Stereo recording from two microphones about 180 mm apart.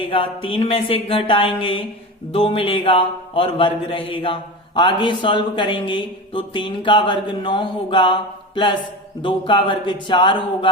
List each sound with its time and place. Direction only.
0.0 s a man's voice: 30° left (ahead or behind)